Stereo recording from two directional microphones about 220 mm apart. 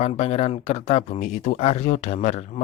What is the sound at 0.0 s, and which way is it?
Speech, 30° left (ahead or behind).